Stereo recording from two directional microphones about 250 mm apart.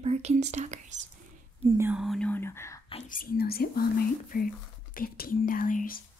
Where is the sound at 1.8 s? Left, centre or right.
Centre.